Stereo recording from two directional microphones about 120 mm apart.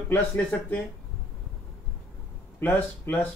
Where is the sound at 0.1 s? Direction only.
15° left (ahead or behind).